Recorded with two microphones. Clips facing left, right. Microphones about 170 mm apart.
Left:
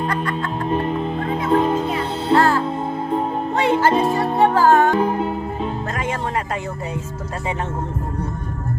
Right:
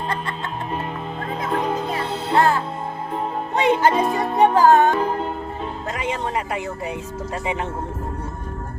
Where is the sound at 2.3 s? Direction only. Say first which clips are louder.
Left 3 dB; 20° right (ahead or behind).